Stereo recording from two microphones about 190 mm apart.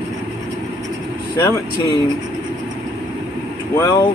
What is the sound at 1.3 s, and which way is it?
Speech, 20° left (ahead or behind).